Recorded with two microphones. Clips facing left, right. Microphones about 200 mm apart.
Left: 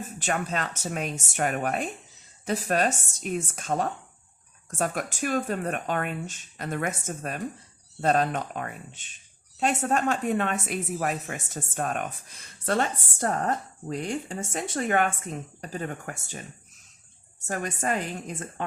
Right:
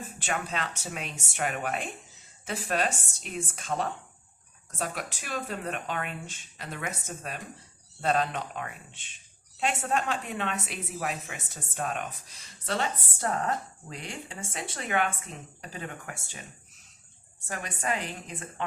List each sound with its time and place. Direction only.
0.2 s a woman's voice: 45° left (ahead or behind)
17.4 s a woman's voice: 45° left (ahead or behind)